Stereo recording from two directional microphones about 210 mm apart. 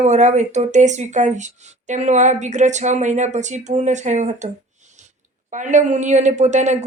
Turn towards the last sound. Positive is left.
turn(degrees=-35)  # may be behind; listen again after turning